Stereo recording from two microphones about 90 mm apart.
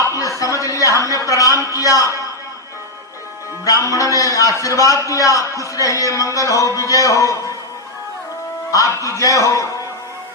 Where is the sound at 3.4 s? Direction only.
30° right (ahead or behind).